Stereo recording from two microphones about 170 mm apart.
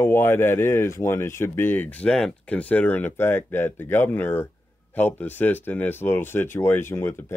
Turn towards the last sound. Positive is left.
turn(degrees=15)  # may be behind; listen again after turning